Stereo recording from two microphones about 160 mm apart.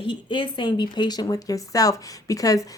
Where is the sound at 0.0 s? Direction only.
30° left (ahead or behind).